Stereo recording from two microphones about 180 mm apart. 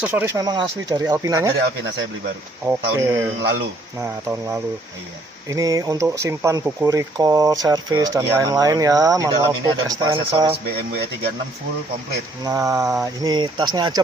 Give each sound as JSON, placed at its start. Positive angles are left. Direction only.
{"t": 0.0, "sound": "speech", "side_deg": -10}
{"t": 2.6, "sound": "speech", "side_deg": -15}
{"t": 5.5, "sound": "speech", "side_deg": -20}
{"t": 12.5, "sound": "speech", "side_deg": -20}